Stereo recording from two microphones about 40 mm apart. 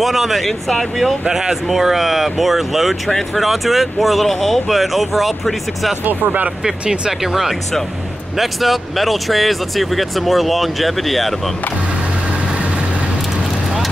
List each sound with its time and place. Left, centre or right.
0.0 s speech: centre
1.2 s speech: centre
3.1 s speech: centre
6.0 s speech: right
6.6 s speech: centre
8.4 s speech: centre